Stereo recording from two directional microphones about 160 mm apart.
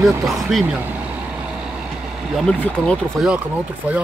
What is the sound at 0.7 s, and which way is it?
Vehicle, 10° right (ahead or behind).